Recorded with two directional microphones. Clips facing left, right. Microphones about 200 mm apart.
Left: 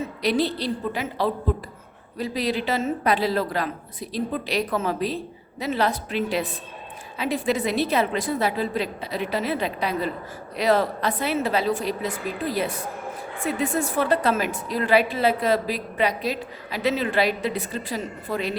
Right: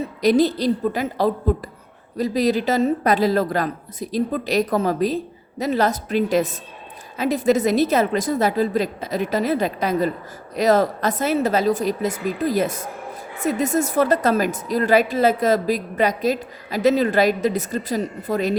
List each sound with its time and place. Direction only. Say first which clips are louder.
0.2 s a woman's voice: right 7 dB; 45° right (ahead or behind)